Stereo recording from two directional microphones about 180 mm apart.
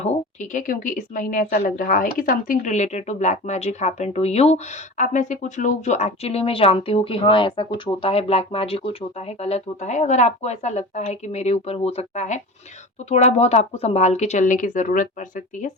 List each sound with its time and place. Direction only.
0.5 s a woman's voice: 45° left (ahead or behind)